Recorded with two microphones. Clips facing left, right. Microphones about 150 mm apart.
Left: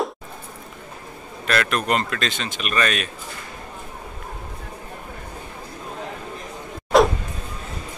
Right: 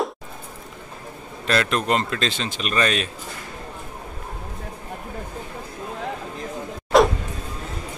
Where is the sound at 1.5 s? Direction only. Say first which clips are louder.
Right 1 dB; 25° right (ahead or behind).